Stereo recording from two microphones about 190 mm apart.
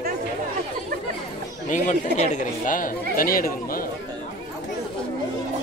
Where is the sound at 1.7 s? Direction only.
40° left (ahead or behind).